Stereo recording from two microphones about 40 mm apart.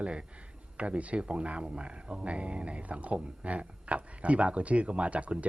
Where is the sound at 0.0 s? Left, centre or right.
Right.